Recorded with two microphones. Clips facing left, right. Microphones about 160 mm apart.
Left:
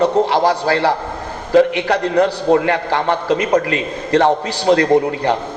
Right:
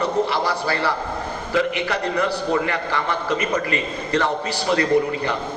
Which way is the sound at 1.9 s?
65° left (ahead or behind).